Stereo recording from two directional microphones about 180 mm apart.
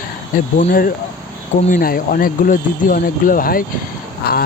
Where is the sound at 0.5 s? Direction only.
50° left (ahead or behind).